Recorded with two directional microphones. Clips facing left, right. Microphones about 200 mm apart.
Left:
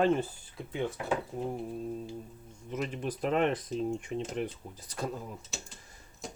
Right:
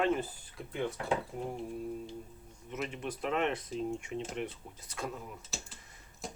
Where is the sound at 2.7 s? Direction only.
40° left (ahead or behind).